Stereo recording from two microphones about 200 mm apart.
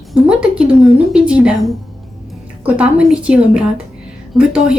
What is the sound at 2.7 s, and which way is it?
Speech, 5° right (ahead or behind).